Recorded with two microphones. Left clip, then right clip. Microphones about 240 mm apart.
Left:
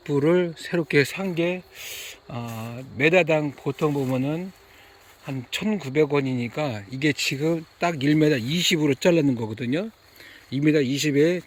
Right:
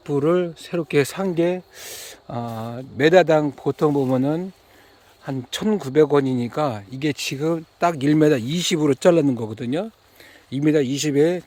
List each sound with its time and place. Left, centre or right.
0.0 s speech: centre
1.0 s speech: right